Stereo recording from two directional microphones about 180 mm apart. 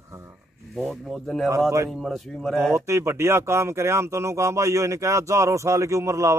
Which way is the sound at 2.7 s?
15° right (ahead or behind).